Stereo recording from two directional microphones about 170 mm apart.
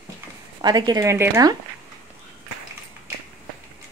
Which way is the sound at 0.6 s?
25° right (ahead or behind).